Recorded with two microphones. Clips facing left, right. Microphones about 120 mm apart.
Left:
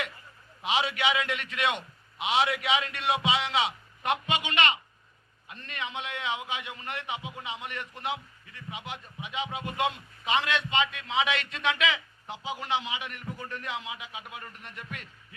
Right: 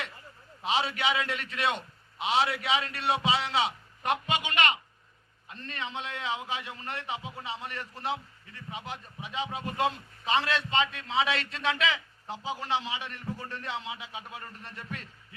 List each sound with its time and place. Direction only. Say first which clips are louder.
0.6 s a man's voice: left 1 dB; 35° right (ahead or behind)
5.5 s a man's voice: even; 35° right (ahead or behind)